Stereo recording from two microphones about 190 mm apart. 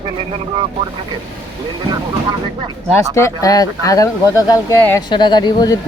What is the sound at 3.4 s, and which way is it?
Speech, 20° left (ahead or behind).